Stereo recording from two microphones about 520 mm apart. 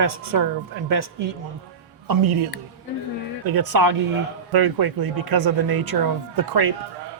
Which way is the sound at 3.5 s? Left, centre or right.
Right.